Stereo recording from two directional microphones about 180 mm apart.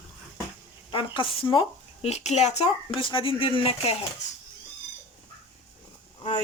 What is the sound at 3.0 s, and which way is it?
Speech, 30° left (ahead or behind).